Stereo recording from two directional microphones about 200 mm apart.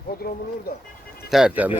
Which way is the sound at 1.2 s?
5° right (ahead or behind).